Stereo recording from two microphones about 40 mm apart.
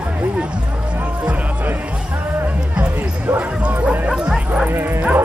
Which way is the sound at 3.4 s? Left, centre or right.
Right.